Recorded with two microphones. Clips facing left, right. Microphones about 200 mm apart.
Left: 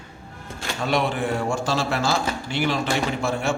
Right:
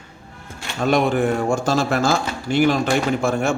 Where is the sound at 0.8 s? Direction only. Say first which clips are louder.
Right 6 dB; 45° right (ahead or behind).